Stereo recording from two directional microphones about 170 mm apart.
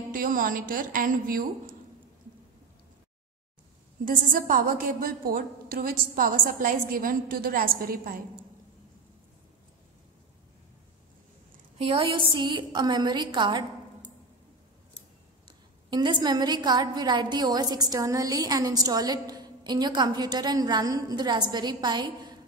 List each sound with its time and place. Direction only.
0.1 s a woman's voice: 55° right (ahead or behind)
4.0 s a woman's voice: 55° right (ahead or behind)
11.8 s a woman's voice: 30° right (ahead or behind)
15.4 s a woman's voice: 25° right (ahead or behind)